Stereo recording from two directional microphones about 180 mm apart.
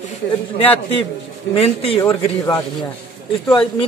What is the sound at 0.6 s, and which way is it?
A man's voice, 30° left (ahead or behind).